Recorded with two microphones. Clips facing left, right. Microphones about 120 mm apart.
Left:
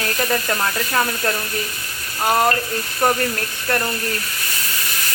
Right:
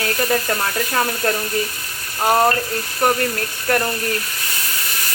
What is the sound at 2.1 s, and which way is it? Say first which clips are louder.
Speech: right 2 dB; 10° right (ahead or behind).